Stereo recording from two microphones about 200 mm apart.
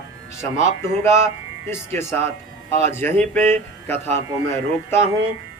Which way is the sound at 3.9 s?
30° right (ahead or behind).